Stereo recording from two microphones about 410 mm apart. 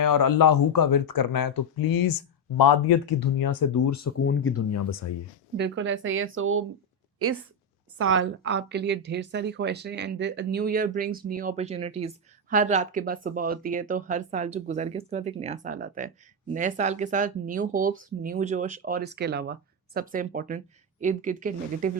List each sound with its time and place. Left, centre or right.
0.0 s speech: left
3.2 s speech: left
4.2 s speech: left
5.5 s a woman's voice: right
7.9 s a woman's voice: right